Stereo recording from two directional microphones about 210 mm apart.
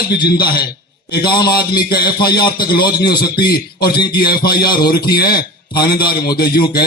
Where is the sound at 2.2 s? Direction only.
45° left (ahead or behind).